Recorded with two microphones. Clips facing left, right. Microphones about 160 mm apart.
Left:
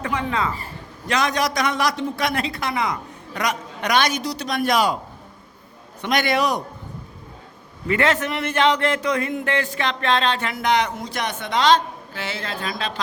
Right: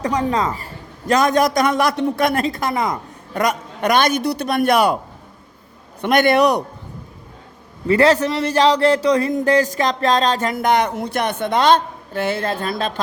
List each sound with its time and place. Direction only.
0.0 s a man's voice: 40° right (ahead or behind); by 4.9 s 60° right (ahead or behind)
6.0 s a man's voice: 55° right (ahead or behind)
7.9 s a man's voice: 35° right (ahead or behind); by 13.0 s 50° right (ahead or behind)